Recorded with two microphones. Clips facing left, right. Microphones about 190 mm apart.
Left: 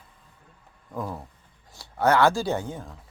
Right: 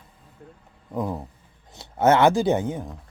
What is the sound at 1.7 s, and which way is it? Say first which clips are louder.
Speech: right 4 dB; 20° right (ahead or behind).